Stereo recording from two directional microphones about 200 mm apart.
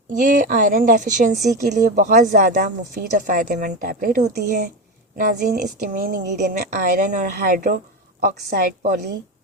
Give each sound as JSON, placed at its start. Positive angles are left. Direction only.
{"t": 0.1, "sound": "a woman's voice", "side_deg": -40}